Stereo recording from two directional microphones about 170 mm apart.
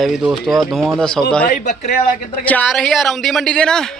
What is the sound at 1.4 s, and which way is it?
Speech, 50° left (ahead or behind).